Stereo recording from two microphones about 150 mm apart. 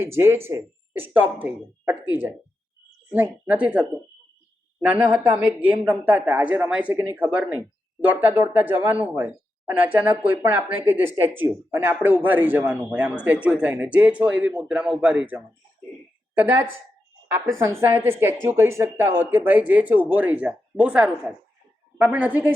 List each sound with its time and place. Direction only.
0.0 s speech: 15° right (ahead or behind)
17.6 s speech: 15° right (ahead or behind)